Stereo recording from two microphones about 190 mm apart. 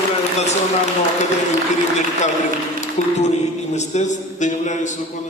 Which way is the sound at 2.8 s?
35° left (ahead or behind).